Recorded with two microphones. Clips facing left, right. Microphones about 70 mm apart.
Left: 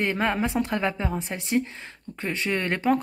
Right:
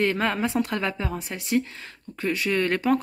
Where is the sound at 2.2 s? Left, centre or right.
Left.